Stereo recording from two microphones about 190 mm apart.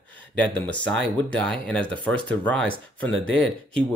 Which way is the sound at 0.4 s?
5° left (ahead or behind).